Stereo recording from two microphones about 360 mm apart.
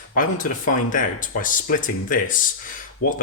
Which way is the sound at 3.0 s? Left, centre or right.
Left.